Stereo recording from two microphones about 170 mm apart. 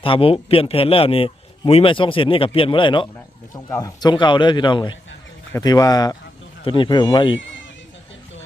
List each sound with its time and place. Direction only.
0.0 s a man's voice: 35° left (ahead or behind)